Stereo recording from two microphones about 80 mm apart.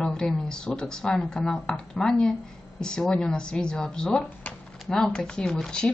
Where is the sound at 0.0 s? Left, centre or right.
Centre.